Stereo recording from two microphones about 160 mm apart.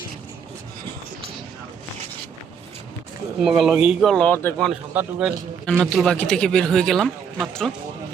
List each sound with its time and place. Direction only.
3.4 s speech: 5° right (ahead or behind)
4.7 s speech: 5° right (ahead or behind)